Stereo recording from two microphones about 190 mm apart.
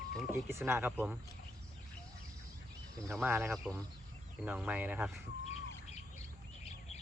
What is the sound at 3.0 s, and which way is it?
Speech, 15° right (ahead or behind).